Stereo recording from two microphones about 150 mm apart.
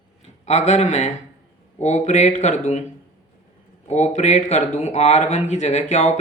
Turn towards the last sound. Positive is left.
turn(degrees=50)  # may be behind; listen again after turning